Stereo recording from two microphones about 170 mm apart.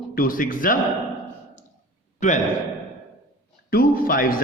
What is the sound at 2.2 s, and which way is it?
Speech, 45° left (ahead or behind).